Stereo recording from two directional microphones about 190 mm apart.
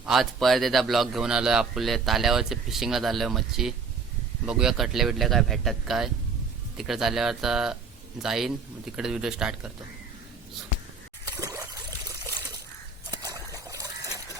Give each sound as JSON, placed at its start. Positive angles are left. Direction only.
{"t": 0.0, "sound": "speech", "side_deg": 0}
{"t": 11.3, "sound": "trickle", "side_deg": -15}
{"t": 13.1, "sound": "a sound", "side_deg": -20}